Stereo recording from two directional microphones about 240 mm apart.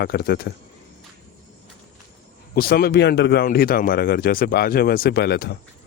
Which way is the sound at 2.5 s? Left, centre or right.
Left.